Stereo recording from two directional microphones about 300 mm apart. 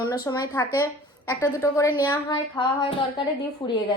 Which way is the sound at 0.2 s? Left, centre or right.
Centre.